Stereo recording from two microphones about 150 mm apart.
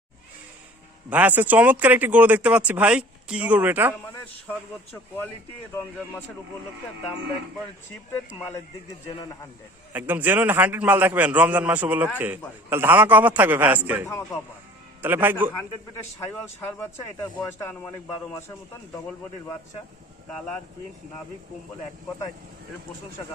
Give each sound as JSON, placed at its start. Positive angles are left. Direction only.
{"t": 1.1, "sound": "speech", "side_deg": -10}
{"t": 8.4, "sound": "speech", "side_deg": 15}
{"t": 9.9, "sound": "speech", "side_deg": -10}
{"t": 14.1, "sound": "speech", "side_deg": 20}
{"t": 15.0, "sound": "speech", "side_deg": -15}
{"t": 16.2, "sound": "speech", "side_deg": 15}